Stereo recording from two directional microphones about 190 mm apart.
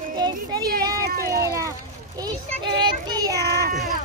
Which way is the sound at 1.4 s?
15° right (ahead or behind).